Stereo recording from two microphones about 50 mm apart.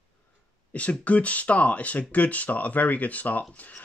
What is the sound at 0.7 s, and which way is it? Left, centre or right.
Speech, left.